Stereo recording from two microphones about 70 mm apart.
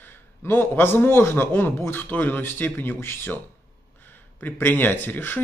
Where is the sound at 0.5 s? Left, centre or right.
Left.